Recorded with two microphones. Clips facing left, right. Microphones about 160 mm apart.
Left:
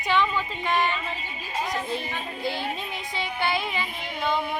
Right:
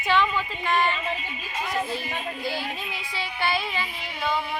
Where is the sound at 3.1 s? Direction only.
20° left (ahead or behind).